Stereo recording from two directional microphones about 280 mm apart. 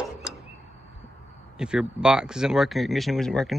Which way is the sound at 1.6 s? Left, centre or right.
Centre.